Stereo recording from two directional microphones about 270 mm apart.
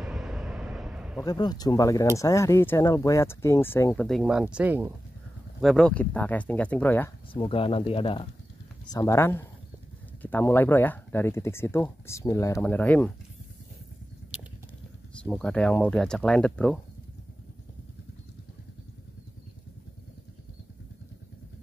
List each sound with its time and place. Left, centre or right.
0.0 s vehicle: centre
1.2 s speech: centre
7.3 s speech: centre
15.1 s speech: centre